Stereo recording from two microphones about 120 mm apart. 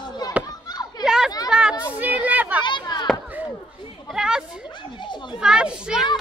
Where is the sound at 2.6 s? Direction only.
40° left (ahead or behind).